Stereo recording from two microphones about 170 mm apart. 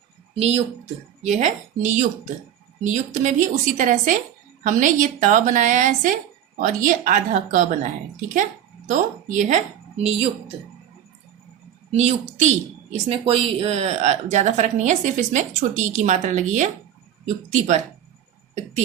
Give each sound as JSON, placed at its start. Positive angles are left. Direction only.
{"t": 0.3, "sound": "a woman's voice", "side_deg": -40}
{"t": 11.9, "sound": "a woman's voice", "side_deg": -40}